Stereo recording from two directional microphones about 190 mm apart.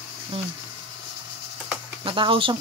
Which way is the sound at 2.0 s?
25° right (ahead or behind).